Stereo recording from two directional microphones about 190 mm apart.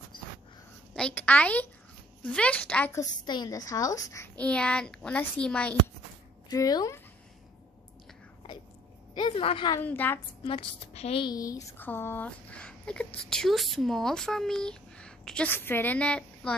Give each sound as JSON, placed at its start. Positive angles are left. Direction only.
{"t": 0.9, "sound": "a woman's voice", "side_deg": 5}
{"t": 6.5, "sound": "a woman's voice", "side_deg": 20}
{"t": 9.1, "sound": "a woman's voice", "side_deg": 25}
{"t": 9.8, "sound": "a woman's voice", "side_deg": 10}
{"t": 10.4, "sound": "a woman's voice", "side_deg": 30}